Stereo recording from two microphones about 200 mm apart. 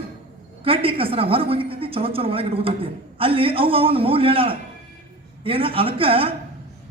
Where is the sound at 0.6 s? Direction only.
30° right (ahead or behind).